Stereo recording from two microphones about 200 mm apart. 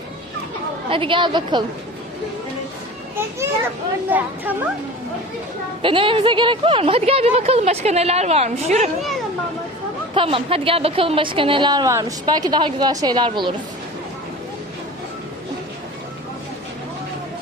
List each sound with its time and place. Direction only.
0.9 s a woman's voice: 25° right (ahead or behind)
3.2 s a child's voice: 10° right (ahead or behind)
5.8 s speech: 25° right (ahead or behind)
10.2 s a woman's voice: 30° right (ahead or behind)